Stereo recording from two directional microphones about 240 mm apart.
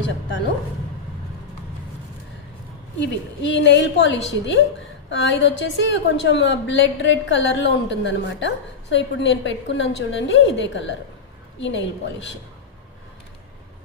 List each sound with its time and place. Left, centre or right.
3.0 s a woman's voice: left